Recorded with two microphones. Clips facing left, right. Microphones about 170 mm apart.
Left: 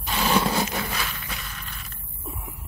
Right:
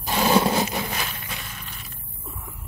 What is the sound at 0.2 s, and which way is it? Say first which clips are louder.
Roar: right 3 dB; 25° right (ahead or behind).